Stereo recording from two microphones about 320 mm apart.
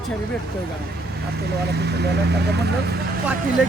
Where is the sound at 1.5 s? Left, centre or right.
Right.